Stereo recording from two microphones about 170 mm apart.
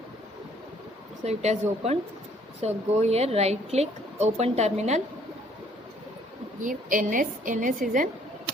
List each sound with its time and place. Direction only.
1.2 s speech: 40° right (ahead or behind)
6.6 s a woman's voice: 50° right (ahead or behind)